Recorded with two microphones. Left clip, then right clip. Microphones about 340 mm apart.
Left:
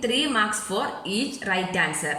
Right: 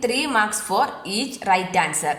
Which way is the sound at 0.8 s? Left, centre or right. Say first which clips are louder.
Right 7 dB; centre.